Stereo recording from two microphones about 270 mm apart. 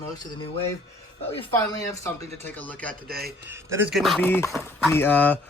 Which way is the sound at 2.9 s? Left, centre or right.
Right.